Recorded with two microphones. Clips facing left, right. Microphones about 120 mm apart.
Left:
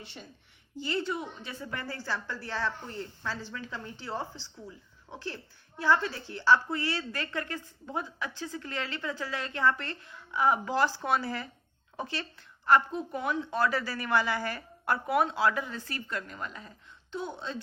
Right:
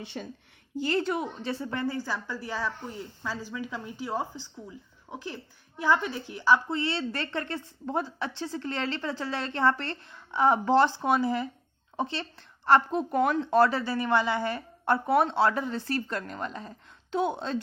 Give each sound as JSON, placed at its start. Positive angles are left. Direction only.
{"t": 0.1, "sound": "a woman's voice", "side_deg": -75}
{"t": 0.8, "sound": "speech", "side_deg": -45}
{"t": 1.5, "sound": "a woman's voice", "side_deg": -30}
{"t": 13.1, "sound": "speech", "side_deg": -50}
{"t": 13.4, "sound": "a woman's voice", "side_deg": -30}
{"t": 17.2, "sound": "a woman's voice", "side_deg": -75}